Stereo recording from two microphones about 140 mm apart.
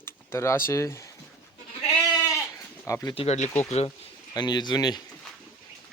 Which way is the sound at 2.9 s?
25° left (ahead or behind).